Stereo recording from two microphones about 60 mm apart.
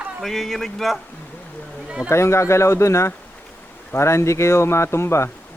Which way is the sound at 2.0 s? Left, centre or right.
Left.